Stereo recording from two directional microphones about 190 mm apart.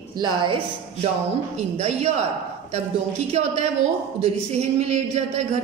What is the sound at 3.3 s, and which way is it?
A man's voice, 35° right (ahead or behind).